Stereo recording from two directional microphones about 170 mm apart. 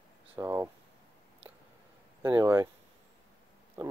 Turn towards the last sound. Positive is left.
turn(degrees=-25)  # may be behind; listen again after turning